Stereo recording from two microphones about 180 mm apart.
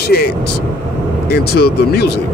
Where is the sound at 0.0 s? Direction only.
60° left (ahead or behind).